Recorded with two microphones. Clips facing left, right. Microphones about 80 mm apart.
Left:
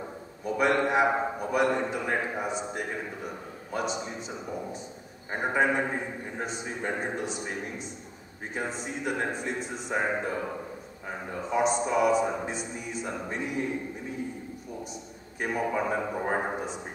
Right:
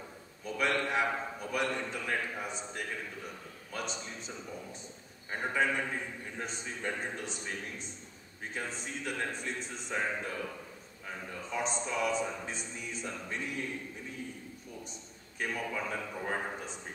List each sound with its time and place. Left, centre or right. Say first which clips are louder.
0.5 s a sound: left 7 dB; centre
1.2 s a man's voice: left 8 dB; left
2.4 s a man's voice: left 7 dB; centre
6.4 s a man's voice: left 5 dB; centre
11.4 s speech: left 10 dB; centre
15.3 s a man's voice: left 7 dB; left